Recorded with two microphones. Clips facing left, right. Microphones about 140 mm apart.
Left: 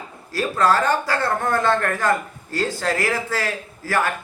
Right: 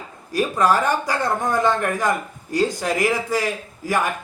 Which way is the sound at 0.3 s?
15° right (ahead or behind).